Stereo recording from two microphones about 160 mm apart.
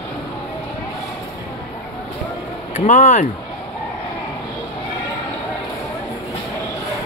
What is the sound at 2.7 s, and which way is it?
Speech, 50° left (ahead or behind).